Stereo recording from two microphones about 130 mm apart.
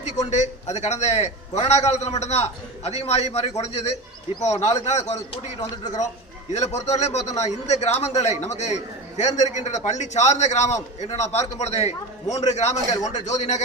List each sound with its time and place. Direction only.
0.3 s a man's voice: 60° left (ahead or behind)
6.5 s a man's voice: 60° left (ahead or behind)